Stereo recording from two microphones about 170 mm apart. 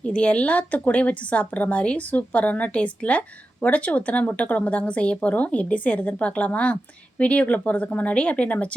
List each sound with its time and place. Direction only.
0.0 s a woman's voice: 5° left (ahead or behind)